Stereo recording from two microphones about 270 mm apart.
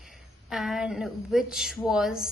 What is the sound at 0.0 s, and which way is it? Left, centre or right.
Speech, centre.